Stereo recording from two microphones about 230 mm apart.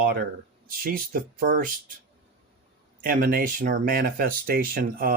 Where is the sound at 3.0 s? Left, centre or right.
Right.